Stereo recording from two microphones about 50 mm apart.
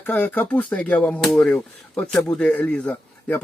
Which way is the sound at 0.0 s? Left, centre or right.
Left.